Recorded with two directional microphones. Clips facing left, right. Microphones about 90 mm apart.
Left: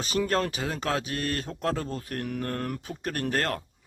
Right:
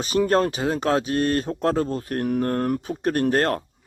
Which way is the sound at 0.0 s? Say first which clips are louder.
Right 7 dB; 25° right (ahead or behind).